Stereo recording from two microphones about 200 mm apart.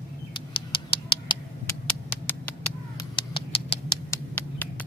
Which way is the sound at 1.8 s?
5° left (ahead or behind).